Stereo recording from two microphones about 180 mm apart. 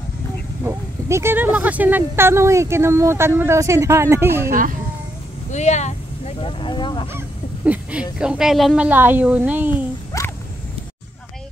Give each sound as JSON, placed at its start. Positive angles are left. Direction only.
{"t": 0.7, "sound": "speech", "side_deg": -15}
{"t": 4.5, "sound": "speech", "side_deg": -50}
{"t": 5.5, "sound": "speech", "side_deg": 40}
{"t": 7.2, "sound": "speech", "side_deg": -10}
{"t": 10.1, "sound": "a sound", "side_deg": 20}